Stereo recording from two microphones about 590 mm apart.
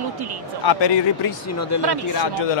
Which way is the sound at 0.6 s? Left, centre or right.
Left.